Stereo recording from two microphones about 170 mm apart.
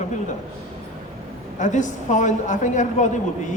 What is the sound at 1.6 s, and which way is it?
A woman's voice, 45° left (ahead or behind).